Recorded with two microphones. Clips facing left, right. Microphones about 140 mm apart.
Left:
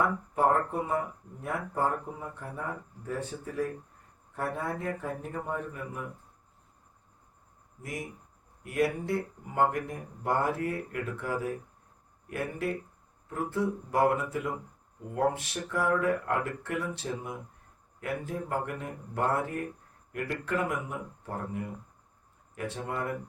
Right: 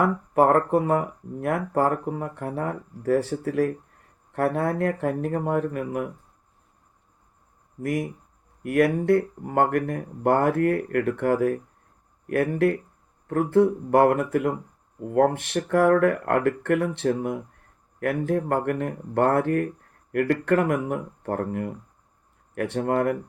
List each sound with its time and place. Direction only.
0.3 s speech: 75° right (ahead or behind)
7.8 s speech: 60° right (ahead or behind)